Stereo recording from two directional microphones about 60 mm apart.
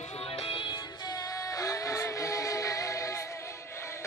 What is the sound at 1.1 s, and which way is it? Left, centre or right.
Music, left.